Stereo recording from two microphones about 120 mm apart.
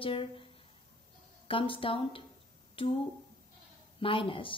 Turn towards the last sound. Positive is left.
turn(degrees=45)  # may be behind; listen again after turning